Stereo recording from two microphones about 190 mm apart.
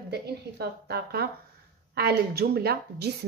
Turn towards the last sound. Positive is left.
turn(degrees=-55)  # may be behind; listen again after turning